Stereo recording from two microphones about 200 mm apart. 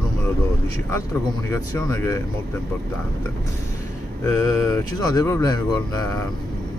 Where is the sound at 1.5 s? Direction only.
15° left (ahead or behind).